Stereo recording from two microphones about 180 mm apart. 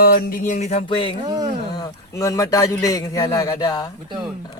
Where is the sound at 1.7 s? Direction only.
20° left (ahead or behind).